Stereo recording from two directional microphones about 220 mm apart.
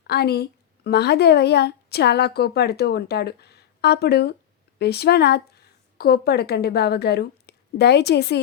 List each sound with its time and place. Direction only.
0.1 s a woman's voice: 45° left (ahead or behind)